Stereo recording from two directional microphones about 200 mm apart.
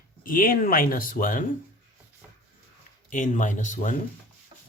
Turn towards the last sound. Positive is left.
turn(degrees=40)  # may be behind; listen again after turning